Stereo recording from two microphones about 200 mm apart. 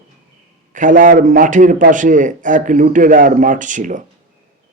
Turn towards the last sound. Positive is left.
turn(degrees=-40)  # may be behind; listen again after turning